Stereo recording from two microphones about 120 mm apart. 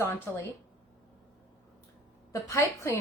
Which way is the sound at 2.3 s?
25° left (ahead or behind).